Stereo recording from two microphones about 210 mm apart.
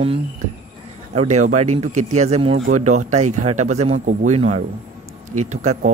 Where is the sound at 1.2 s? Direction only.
35° right (ahead or behind).